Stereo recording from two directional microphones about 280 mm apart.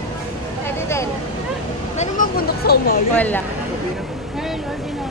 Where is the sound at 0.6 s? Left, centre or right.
Centre.